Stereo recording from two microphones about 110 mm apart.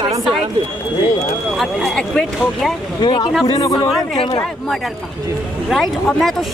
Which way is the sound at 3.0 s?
45° left (ahead or behind).